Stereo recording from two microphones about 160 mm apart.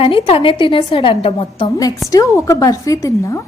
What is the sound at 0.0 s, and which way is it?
A woman's voice, 35° left (ahead or behind).